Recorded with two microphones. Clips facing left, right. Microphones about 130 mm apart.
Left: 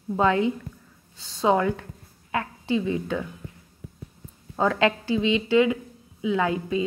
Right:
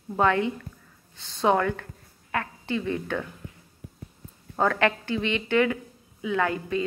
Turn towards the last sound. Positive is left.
turn(degrees=20)  # may be behind; listen again after turning